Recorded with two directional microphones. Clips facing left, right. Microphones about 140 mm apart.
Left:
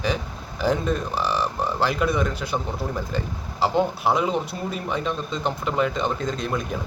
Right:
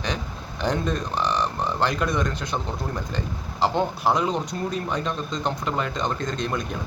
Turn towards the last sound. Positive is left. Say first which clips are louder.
# left 1 dB
turn(degrees=0)  # may be behind; listen again after turning